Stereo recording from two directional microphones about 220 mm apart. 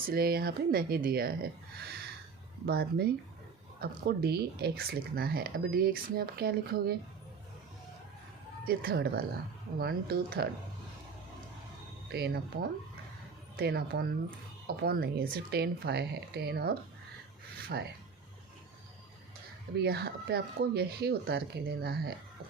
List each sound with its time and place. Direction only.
0.1 s speech: 45° right (ahead or behind)
8.6 s speech: 45° right (ahead or behind)
12.1 s speech: 45° right (ahead or behind)
17.7 s speech: 45° right (ahead or behind)
19.8 s speech: 50° right (ahead or behind)